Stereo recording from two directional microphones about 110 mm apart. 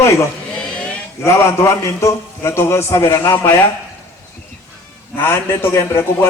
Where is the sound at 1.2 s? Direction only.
25° left (ahead or behind).